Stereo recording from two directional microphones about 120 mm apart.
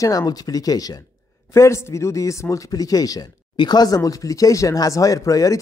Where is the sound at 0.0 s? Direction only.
30° left (ahead or behind).